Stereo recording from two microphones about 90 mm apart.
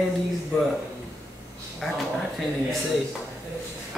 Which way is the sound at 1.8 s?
5° left (ahead or behind).